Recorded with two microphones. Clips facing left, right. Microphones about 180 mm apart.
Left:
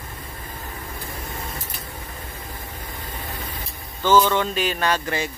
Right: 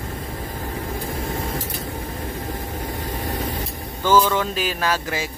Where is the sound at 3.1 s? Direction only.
40° right (ahead or behind).